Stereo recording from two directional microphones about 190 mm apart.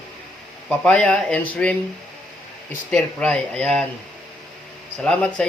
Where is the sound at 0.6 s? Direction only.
5° left (ahead or behind).